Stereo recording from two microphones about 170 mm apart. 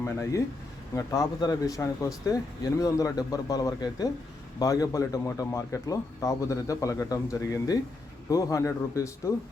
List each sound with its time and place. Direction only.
0.0 s a man's voice: 15° left (ahead or behind)